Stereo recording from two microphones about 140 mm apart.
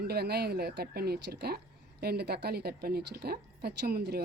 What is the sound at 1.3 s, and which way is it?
Speech, 90° right.